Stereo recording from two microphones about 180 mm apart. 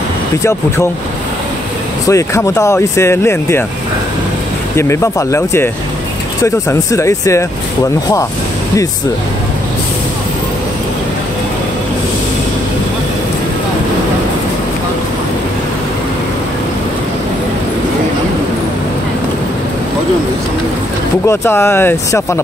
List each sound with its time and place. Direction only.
0.4 s speech: 15° left (ahead or behind)
2.0 s speech: 15° left (ahead or behind)
4.7 s speech: 15° left (ahead or behind)
21.3 s speech: 15° left (ahead or behind)